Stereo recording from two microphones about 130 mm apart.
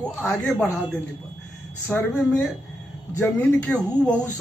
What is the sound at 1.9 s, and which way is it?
Speech, 10° left (ahead or behind).